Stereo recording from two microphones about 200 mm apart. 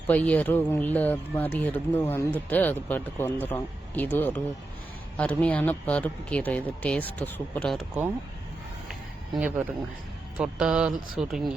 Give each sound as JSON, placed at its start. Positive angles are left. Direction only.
{"t": 0.1, "sound": "a man's voice", "side_deg": 10}
{"t": 9.3, "sound": "speech", "side_deg": -5}